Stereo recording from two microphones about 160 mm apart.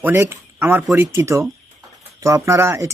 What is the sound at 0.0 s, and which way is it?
Speech, 15° right (ahead or behind).